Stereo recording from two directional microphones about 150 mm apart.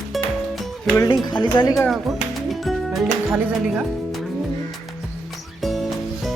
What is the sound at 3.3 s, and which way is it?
Speech, 5° right (ahead or behind).